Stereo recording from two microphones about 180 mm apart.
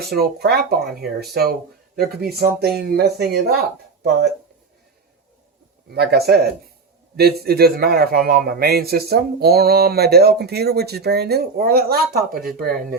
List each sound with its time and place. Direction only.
0.1 s a man's voice: 60° right (ahead or behind)
5.9 s a man's voice: 60° right (ahead or behind)